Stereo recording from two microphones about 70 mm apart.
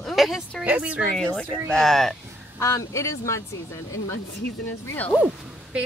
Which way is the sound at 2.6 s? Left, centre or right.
Left.